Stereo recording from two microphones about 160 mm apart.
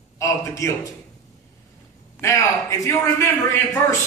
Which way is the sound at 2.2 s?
20° left (ahead or behind).